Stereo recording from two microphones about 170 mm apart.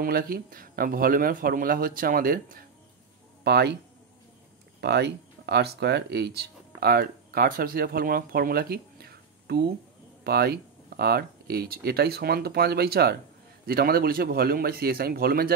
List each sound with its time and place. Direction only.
0.0 s a man's voice: 60° right (ahead or behind)
3.4 s speech: 75° right (ahead or behind)
4.7 s a man's voice: 75° right (ahead or behind); by 15.5 s 60° right (ahead or behind)